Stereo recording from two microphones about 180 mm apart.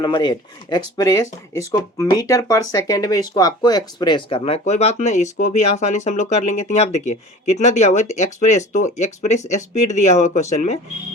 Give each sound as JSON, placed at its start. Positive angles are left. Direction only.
{"t": 0.0, "sound": "speech", "side_deg": 25}